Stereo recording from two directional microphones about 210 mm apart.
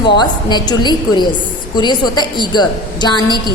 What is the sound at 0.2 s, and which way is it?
A woman's voice, 20° left (ahead or behind).